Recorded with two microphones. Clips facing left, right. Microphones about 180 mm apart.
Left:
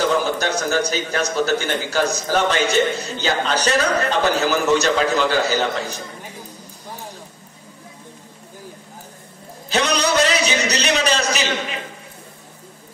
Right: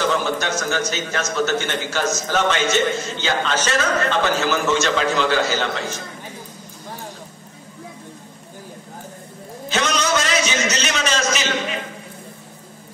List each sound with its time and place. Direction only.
0.2 s a man's voice: 35° left (ahead or behind)
9.7 s a man's voice: 35° left (ahead or behind)